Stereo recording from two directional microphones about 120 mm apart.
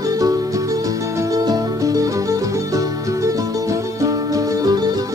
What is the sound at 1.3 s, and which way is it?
Music, 30° right (ahead or behind).